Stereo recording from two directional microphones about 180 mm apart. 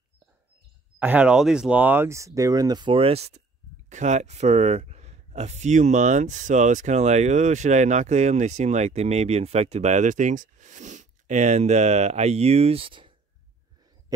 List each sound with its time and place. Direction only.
0.9 s speech: 10° right (ahead or behind); by 13.1 s 30° right (ahead or behind)